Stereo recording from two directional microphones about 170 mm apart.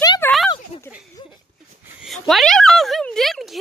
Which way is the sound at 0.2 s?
10° left (ahead or behind).